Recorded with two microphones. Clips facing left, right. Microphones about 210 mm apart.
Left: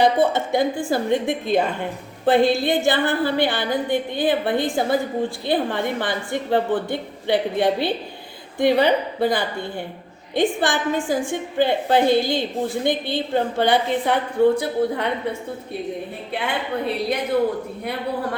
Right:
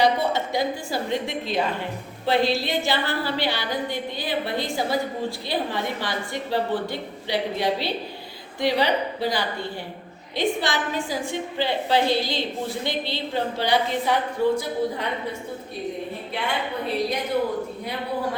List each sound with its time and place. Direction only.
0.0 s a woman's voice: 50° left (ahead or behind)